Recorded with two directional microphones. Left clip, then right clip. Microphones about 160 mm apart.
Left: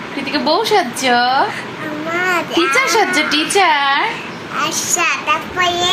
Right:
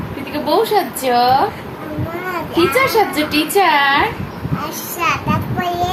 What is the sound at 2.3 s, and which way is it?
Speech, centre (ahead or behind).